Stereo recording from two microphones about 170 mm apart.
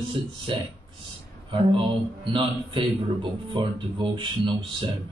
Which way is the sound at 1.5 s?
30° right (ahead or behind).